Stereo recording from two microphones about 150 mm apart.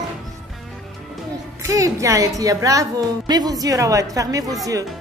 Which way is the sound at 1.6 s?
20° right (ahead or behind).